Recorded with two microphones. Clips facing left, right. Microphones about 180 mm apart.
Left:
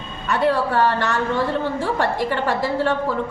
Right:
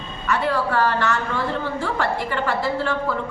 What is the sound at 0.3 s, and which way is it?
Speech, 30° left (ahead or behind).